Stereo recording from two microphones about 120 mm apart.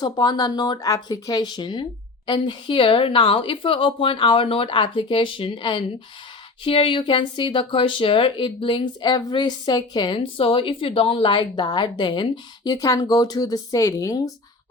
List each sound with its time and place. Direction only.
0.0 s speech: 35° left (ahead or behind)